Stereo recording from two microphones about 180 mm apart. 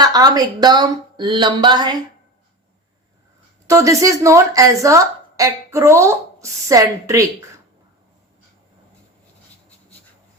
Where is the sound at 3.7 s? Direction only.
15° right (ahead or behind).